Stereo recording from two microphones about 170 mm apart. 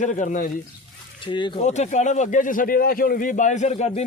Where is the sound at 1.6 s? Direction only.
45° left (ahead or behind).